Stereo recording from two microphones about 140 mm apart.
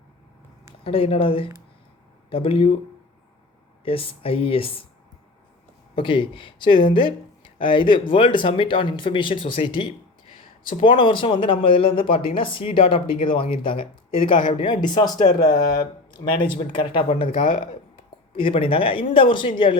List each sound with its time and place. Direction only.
0.9 s speech: 40° left (ahead or behind)
3.8 s speech: 40° left (ahead or behind)
6.0 s speech: 35° left (ahead or behind)
18.3 s speech: 40° left (ahead or behind)